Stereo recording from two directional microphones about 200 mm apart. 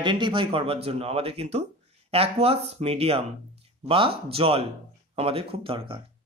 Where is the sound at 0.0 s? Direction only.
25° right (ahead or behind).